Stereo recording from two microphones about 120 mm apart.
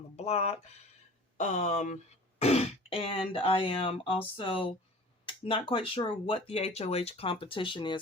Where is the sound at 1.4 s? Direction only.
90° left.